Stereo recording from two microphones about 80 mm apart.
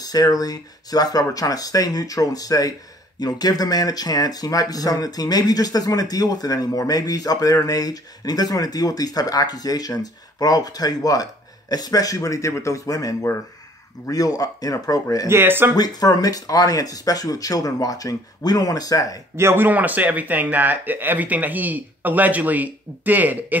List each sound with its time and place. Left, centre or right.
0.0 s speech: left
15.2 s speech: right
15.7 s speech: left
19.3 s speech: right